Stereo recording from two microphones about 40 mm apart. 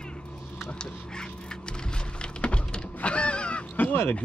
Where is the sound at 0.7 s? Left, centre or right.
Centre.